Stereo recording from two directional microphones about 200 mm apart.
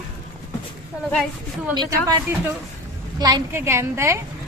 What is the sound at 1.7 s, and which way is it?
Speech, 20° right (ahead or behind).